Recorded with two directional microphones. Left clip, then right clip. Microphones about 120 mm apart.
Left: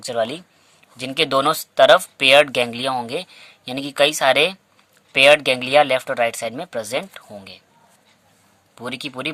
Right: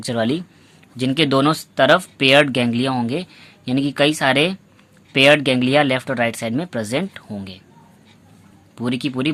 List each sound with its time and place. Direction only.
0.0 s speech: 20° left (ahead or behind)
8.7 s speech: 35° left (ahead or behind)